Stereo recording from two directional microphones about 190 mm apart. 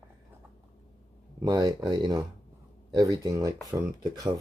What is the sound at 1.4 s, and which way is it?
Speech, 20° right (ahead or behind).